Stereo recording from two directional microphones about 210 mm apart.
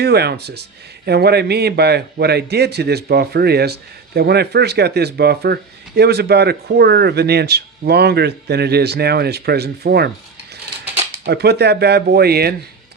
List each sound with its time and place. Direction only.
0.0 s speech: 50° right (ahead or behind)
11.3 s speech: 50° right (ahead or behind)